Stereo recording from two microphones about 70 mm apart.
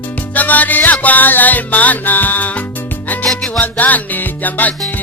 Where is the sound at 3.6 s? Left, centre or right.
Left.